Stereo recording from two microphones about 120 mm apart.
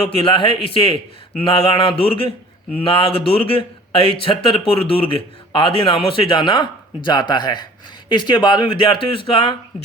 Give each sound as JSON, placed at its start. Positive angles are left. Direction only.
{"t": 0.2, "sound": "a man's voice", "side_deg": 50}